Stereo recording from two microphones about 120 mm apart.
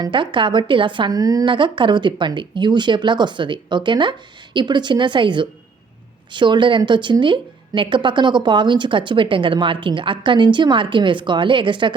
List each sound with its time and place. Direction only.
0.0 s a woman's voice: 40° right (ahead or behind)